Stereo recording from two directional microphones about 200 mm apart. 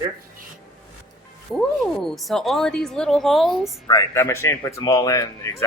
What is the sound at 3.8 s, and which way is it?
A man's voice, 15° left (ahead or behind).